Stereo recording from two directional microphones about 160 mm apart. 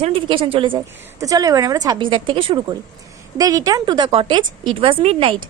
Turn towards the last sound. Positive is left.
turn(degrees=-35)  # may be behind; listen again after turning